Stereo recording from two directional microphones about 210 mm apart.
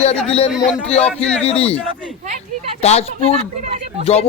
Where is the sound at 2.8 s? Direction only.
30° left (ahead or behind).